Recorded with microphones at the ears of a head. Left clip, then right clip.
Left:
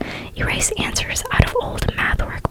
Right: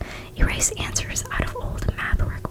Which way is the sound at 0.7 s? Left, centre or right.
Left.